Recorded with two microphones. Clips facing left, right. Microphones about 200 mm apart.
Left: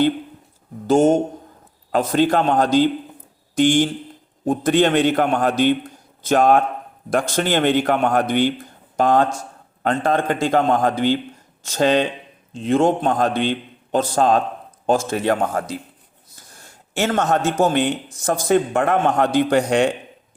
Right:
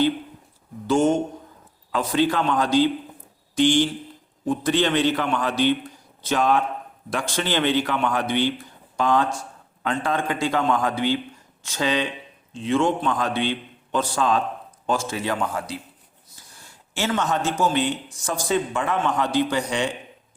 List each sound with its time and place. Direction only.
0.9 s a man's voice: 40° left (ahead or behind)
16.3 s a sound: 45° left (ahead or behind)
17.6 s speech: 55° left (ahead or behind)